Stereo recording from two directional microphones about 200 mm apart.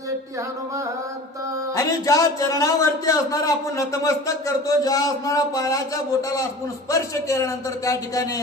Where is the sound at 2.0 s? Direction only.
15° left (ahead or behind).